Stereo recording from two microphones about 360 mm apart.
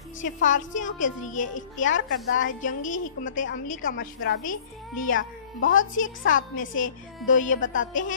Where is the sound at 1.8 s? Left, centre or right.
Left.